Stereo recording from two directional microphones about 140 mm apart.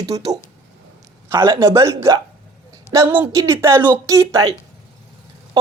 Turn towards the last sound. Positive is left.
turn(degrees=-25)  # may be behind; listen again after turning